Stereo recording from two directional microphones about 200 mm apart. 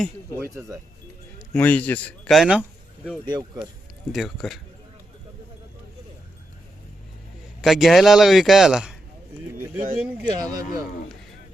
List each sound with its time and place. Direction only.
1.5 s speech: 10° left (ahead or behind)
3.2 s speech: 20° right (ahead or behind)
4.1 s speech: centre (ahead or behind)
7.6 s speech: centre (ahead or behind)
9.7 s speech: 35° right (ahead or behind)
10.5 s speech: 15° right (ahead or behind)